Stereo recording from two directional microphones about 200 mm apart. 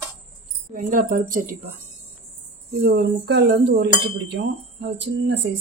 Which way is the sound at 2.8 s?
55° right (ahead or behind).